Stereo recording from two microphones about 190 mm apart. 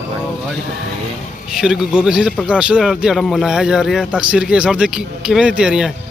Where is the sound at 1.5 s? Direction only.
5° right (ahead or behind).